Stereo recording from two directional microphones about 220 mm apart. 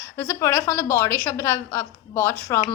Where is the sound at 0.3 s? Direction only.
15° left (ahead or behind).